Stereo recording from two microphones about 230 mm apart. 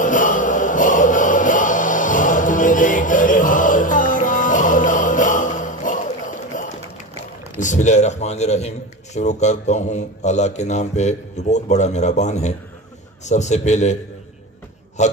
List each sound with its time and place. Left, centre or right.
0.0 s music: left
7.5 s a man's voice: left
15.0 s a man's voice: left